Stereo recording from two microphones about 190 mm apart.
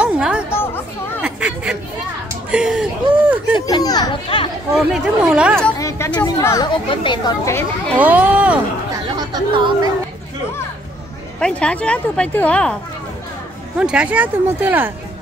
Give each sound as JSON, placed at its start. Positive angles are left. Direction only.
{"t": 0.0, "sound": "chatter", "side_deg": -5}
{"t": 2.5, "sound": "a sound", "side_deg": -5}
{"t": 3.6, "sound": "a child's voice", "side_deg": 20}
{"t": 4.7, "sound": "speech", "side_deg": -5}
{"t": 5.8, "sound": "speech", "side_deg": 15}
{"t": 8.0, "sound": "speech", "side_deg": -10}
{"t": 9.3, "sound": "speech", "side_deg": -20}
{"t": 11.3, "sound": "speech", "side_deg": 5}
{"t": 13.7, "sound": "speech", "side_deg": -5}